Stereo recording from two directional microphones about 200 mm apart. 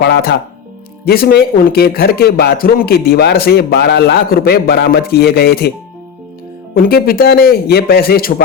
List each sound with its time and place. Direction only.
0.0 s a man's voice: 50° left (ahead or behind)
6.7 s a man's voice: 50° left (ahead or behind)